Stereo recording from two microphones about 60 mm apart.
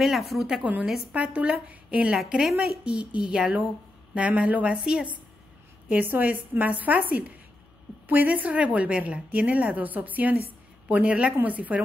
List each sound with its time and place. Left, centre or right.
0.0 s speech: centre
0.5 s a woman's voice: right
2.4 s speech: centre
2.8 s a woman's voice: centre
5.9 s a woman's voice: right